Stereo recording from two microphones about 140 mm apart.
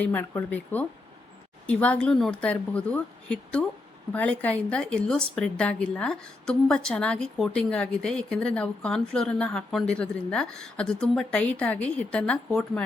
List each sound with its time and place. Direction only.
0.0 s a woman's voice: 10° left (ahead or behind)